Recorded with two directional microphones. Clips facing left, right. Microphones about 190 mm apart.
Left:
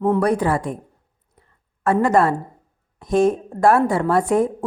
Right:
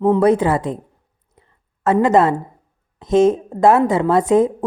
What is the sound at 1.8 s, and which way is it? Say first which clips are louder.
A woman's voice: right 3 dB; 20° right (ahead or behind).